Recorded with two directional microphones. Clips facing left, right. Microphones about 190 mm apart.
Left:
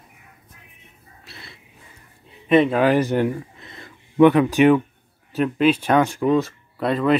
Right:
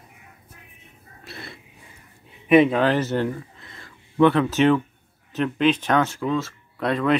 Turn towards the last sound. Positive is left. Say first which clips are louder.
# left 2 dB
turn(degrees=0)  # may be behind; listen again after turning